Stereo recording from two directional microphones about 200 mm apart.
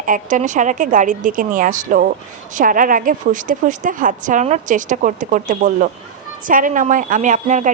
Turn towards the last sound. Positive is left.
turn(degrees=-40)  # may be behind; listen again after turning